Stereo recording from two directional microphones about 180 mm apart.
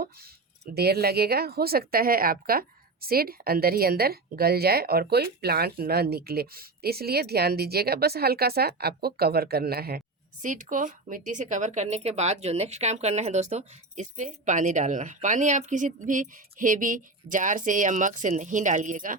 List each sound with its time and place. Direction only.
0.0 s speech: 60° right (ahead or behind)
10.4 s speech: 45° right (ahead or behind)